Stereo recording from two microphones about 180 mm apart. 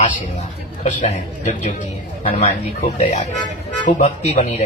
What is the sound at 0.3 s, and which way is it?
A man's voice, 40° left (ahead or behind).